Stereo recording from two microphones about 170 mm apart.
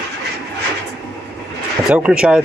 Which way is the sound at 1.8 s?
5° right (ahead or behind).